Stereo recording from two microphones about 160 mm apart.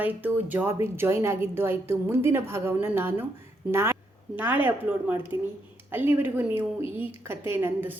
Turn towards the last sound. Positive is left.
turn(degrees=-15)  # may be behind; listen again after turning